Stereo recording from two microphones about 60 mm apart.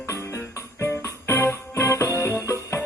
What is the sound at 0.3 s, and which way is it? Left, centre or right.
Music, left.